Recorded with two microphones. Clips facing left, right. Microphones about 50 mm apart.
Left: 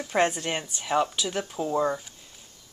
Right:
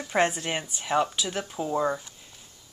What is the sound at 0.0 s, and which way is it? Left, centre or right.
Speech, centre.